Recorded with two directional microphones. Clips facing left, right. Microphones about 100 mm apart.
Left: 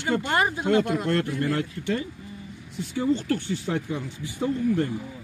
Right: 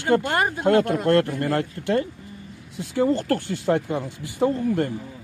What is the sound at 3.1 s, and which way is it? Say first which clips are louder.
Speech: right 2 dB; 45° right (ahead or behind).